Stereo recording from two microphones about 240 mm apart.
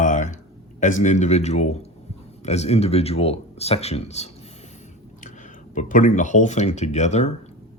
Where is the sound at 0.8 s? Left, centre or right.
Left.